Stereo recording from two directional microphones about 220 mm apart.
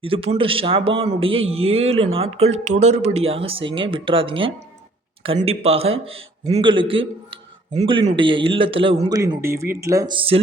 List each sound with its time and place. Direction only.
0.0 s a man's voice: 25° right (ahead or behind)